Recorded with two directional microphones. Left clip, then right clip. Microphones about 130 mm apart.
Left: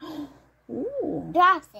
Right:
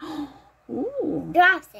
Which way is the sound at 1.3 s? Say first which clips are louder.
Right 1 dB; 25° right (ahead or behind).